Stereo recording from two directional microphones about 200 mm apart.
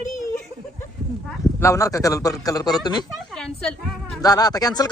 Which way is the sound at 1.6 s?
15° left (ahead or behind).